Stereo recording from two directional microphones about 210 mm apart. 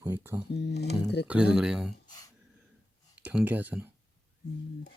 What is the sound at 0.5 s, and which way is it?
Speech, 50° left (ahead or behind).